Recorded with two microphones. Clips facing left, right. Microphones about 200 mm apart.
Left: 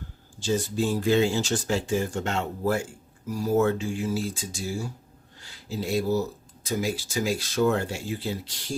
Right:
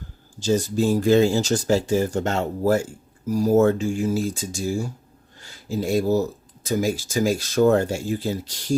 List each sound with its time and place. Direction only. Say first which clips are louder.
0.3 s speech: right 5 dB; 40° right (ahead or behind)